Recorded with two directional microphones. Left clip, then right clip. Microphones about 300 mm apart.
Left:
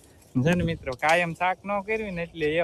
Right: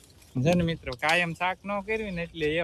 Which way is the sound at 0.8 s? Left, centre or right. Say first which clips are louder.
Left 4 dB; centre.